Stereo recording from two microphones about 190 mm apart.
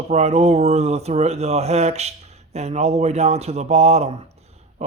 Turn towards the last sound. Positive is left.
turn(degrees=-35)  # may be behind; listen again after turning